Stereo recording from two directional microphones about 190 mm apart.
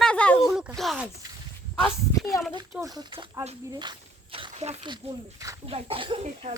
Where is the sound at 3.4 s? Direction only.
35° right (ahead or behind).